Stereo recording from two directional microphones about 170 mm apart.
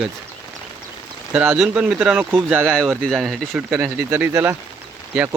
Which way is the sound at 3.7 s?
15° right (ahead or behind).